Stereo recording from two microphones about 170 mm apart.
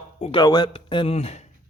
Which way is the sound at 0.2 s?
30° left (ahead or behind).